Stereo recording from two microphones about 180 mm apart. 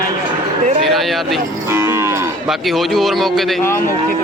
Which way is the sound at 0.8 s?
Centre (ahead or behind).